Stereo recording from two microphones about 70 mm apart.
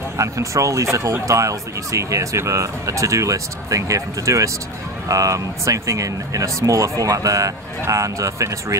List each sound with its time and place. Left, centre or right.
0.2 s speech: right